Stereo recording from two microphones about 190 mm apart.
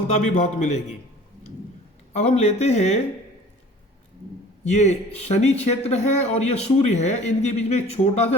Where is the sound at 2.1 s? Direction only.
35° left (ahead or behind).